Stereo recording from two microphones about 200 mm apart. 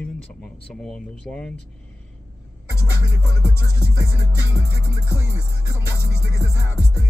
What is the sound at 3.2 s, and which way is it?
Speech, 15° left (ahead or behind).